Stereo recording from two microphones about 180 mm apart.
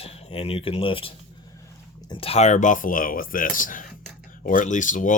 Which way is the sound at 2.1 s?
30° left (ahead or behind).